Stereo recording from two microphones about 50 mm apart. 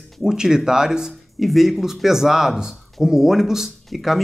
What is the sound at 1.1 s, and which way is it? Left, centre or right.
Speech, centre.